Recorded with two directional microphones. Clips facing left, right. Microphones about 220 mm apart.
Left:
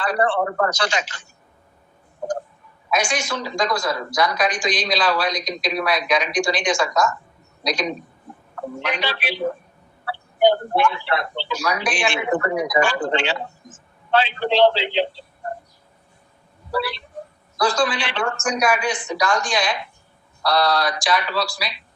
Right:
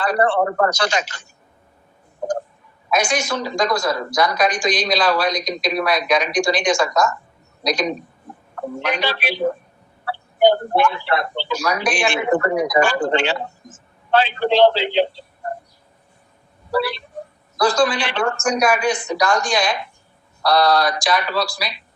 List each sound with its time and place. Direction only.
0.0 s a woman's voice: 40° right (ahead or behind)
2.9 s a woman's voice: 40° right (ahead or behind)
16.7 s a woman's voice: 45° right (ahead or behind)